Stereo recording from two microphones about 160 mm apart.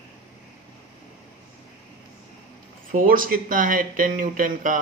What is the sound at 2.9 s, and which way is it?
Speech, 60° right (ahead or behind).